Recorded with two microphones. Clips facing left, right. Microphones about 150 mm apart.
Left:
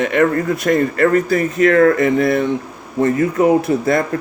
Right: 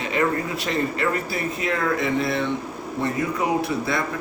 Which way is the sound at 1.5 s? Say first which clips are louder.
Left 13 dB; 65° left (ahead or behind).